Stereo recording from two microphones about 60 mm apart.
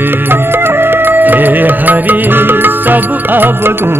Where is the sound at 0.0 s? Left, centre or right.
Right.